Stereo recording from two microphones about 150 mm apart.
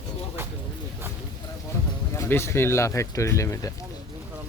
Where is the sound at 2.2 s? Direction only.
15° left (ahead or behind).